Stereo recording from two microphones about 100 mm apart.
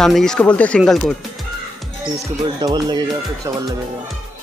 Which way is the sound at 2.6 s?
40° right (ahead or behind).